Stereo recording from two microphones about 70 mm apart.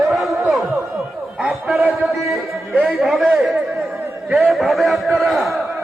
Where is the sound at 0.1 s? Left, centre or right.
Centre.